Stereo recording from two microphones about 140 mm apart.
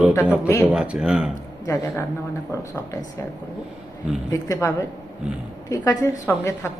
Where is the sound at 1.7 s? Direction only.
25° left (ahead or behind).